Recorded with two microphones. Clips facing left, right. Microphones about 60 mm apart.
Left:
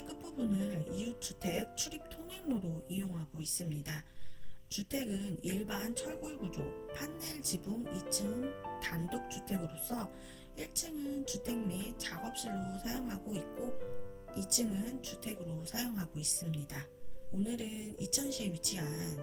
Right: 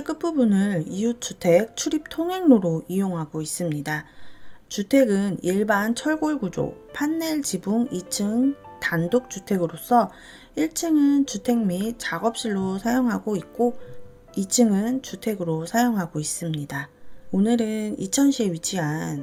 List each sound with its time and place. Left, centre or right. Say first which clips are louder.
0.0 s speech: right 18 dB; right